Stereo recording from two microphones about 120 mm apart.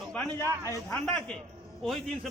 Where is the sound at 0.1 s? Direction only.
15° left (ahead or behind).